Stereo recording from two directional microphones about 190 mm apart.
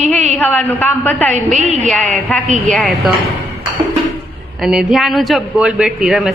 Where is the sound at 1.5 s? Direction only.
35° right (ahead or behind).